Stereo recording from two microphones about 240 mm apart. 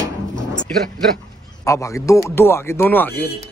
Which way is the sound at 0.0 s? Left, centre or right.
Centre.